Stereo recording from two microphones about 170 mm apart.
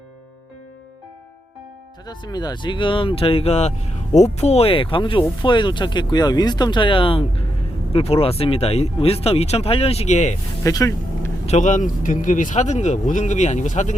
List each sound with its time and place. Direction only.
2.0 s speech: 25° left (ahead or behind); by 10.3 s 45° left (ahead or behind)
10.6 s speech: 20° left (ahead or behind)
11.4 s speech: 45° left (ahead or behind)